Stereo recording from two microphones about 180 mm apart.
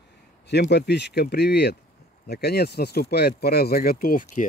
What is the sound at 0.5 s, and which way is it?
Speech, 70° left (ahead or behind).